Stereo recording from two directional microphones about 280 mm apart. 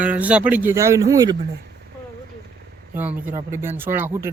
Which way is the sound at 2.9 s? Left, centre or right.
Centre.